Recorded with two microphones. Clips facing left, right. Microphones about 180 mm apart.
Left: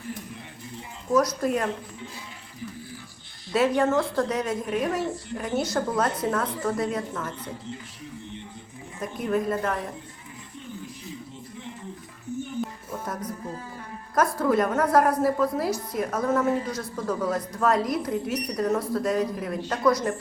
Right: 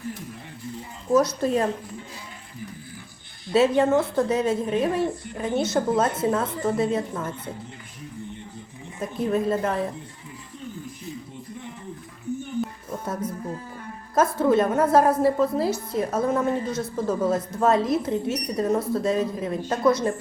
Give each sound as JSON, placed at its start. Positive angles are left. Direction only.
{"t": 1.1, "sound": "a woman's voice", "side_deg": -25}
{"t": 3.5, "sound": "a woman's voice", "side_deg": -25}
{"t": 9.0, "sound": "a woman's voice", "side_deg": -25}
{"t": 14.2, "sound": "a woman's voice", "side_deg": -25}